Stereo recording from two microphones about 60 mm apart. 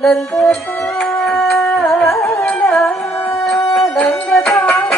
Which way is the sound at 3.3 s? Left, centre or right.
Centre.